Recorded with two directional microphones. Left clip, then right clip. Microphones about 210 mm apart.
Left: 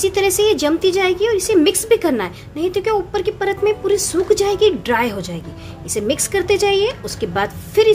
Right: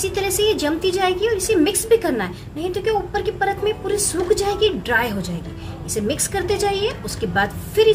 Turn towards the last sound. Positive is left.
turn(degrees=40)  # may be behind; listen again after turning